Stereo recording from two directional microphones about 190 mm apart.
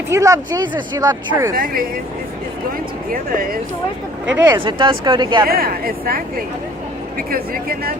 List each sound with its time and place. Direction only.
0.1 s speech: 15° right (ahead or behind)
1.5 s speech: 50° right (ahead or behind)
3.1 s speech: 50° right (ahead or behind)
4.3 s speech: 10° right (ahead or behind)
4.5 s speech: 25° right (ahead or behind)
5.5 s speech: 50° right (ahead or behind)